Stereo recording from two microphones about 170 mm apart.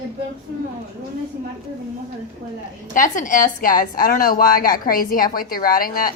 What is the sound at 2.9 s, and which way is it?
A woman's voice, 50° left (ahead or behind).